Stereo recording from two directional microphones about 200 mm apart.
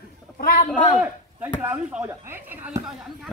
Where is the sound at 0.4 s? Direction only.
45° left (ahead or behind).